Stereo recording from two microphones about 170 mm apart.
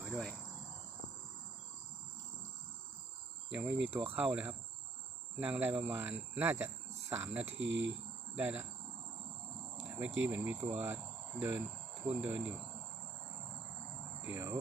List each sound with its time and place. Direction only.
0.0 s cricket: centre (ahead or behind)
3.5 s speech: 5° right (ahead or behind)
7.4 s speech: 90° right
8.4 s speech: 10° right (ahead or behind)
10.2 s cricket: 10° right (ahead or behind)
12.0 s speech: 10° right (ahead or behind)
14.3 s speech: 15° right (ahead or behind)